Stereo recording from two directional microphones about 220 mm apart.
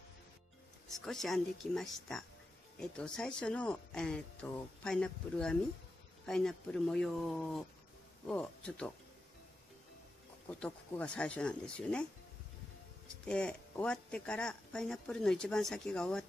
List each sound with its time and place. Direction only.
1.0 s speech: centre (ahead or behind)
10.6 s speech: 5° left (ahead or behind)
13.2 s speech: 5° left (ahead or behind)